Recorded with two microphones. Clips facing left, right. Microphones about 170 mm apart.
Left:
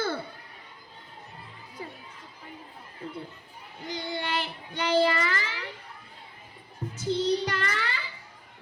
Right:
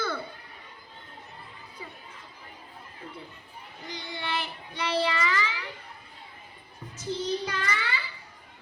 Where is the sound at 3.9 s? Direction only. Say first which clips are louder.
Left 5 dB; 45° left (ahead or behind).